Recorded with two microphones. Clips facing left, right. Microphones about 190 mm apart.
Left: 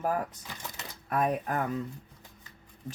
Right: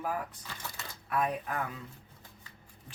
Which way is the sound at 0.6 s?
20° left (ahead or behind).